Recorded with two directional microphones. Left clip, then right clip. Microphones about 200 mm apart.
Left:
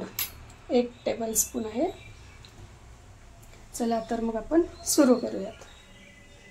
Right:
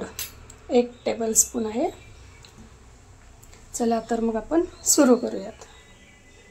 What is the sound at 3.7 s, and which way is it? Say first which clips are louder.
A woman's voice: right 4 dB; 20° right (ahead or behind).